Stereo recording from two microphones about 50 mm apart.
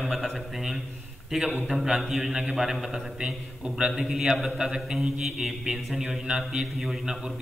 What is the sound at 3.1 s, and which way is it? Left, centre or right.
Speech, centre.